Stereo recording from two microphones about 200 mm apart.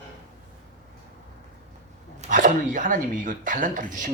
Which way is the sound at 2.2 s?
40° right (ahead or behind).